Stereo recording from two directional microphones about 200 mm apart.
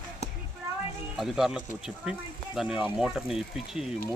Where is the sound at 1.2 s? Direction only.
Centre (ahead or behind).